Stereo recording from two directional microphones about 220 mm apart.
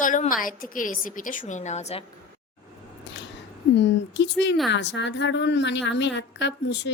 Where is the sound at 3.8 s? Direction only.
55° left (ahead or behind).